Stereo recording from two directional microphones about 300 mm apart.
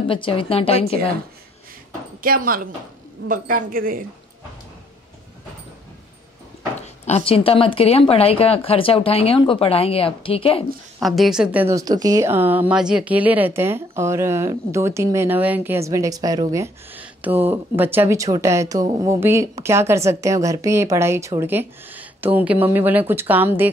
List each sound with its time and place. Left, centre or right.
0.1 s a woman's voice: centre
2.2 s speech: right
7.1 s a woman's voice: centre
11.0 s a woman's voice: centre